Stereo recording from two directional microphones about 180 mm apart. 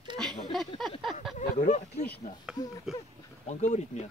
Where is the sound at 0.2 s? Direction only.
Centre (ahead or behind).